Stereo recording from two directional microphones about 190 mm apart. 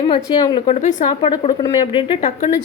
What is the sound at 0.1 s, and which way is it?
Speech, 20° left (ahead or behind).